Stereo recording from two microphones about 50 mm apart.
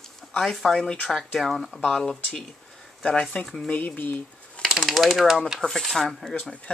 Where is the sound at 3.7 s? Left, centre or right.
Left.